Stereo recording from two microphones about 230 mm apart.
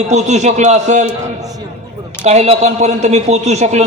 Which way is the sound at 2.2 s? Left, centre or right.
Right.